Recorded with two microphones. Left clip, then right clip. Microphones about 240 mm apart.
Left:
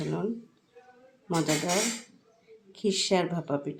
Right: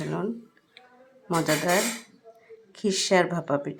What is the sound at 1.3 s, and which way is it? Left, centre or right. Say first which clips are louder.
Speech: right 4 dB; centre.